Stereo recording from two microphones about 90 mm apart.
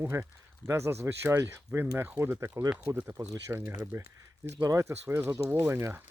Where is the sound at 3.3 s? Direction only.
35° right (ahead or behind).